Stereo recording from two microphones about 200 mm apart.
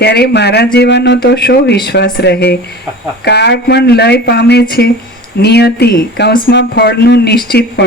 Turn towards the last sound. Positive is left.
turn(degrees=50)  # may be behind; listen again after turning